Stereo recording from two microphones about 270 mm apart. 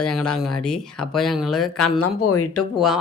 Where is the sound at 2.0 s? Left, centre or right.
Left.